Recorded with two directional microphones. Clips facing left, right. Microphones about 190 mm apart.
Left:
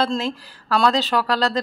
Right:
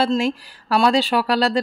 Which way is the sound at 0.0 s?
10° right (ahead or behind).